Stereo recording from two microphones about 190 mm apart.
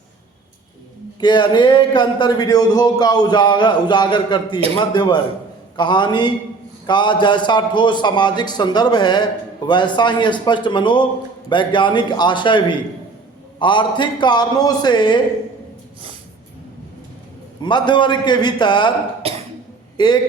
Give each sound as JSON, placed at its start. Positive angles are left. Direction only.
{"t": 1.2, "sound": "a man's voice", "side_deg": 25}
{"t": 17.6, "sound": "a man's voice", "side_deg": 25}
{"t": 19.2, "sound": "cough", "side_deg": -30}
{"t": 20.0, "sound": "a man's voice", "side_deg": 20}